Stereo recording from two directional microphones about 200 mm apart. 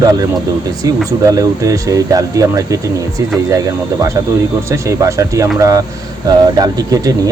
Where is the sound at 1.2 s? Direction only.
15° right (ahead or behind).